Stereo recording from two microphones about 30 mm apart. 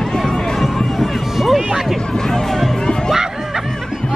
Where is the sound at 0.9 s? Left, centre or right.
Centre.